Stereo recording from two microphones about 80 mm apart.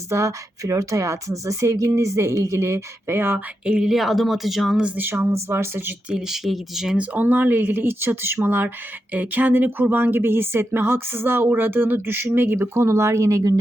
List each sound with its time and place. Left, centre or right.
0.1 s a woman's voice: right
3.7 s speech: centre
3.9 s speech: centre
4.8 s speech: right
6.1 s speech: centre
7.0 s speech: centre; by 13.6 s right